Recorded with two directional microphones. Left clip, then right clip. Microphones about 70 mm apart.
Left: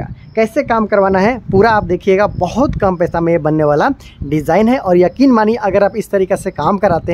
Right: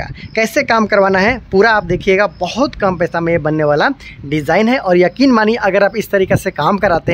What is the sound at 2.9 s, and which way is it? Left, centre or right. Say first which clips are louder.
Speech: left 1 dB; left.